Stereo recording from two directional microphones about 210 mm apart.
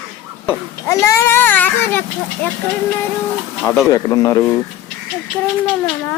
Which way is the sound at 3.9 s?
15° left (ahead or behind).